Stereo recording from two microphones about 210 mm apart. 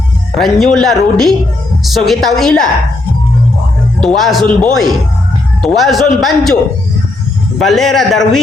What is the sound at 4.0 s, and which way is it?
Speech, centre (ahead or behind).